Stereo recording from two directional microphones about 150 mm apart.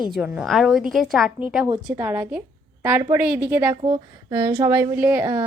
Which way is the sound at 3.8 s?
30° right (ahead or behind).